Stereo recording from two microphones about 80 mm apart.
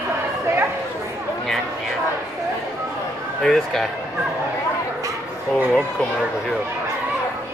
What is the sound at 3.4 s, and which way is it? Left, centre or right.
Speech, centre.